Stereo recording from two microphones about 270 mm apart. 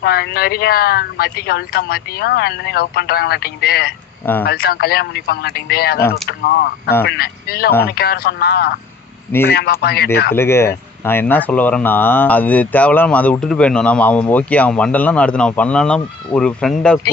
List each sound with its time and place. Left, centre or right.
0.0 s speech: left
6.0 s speech: centre
6.2 s speech: left
10.3 s speech: centre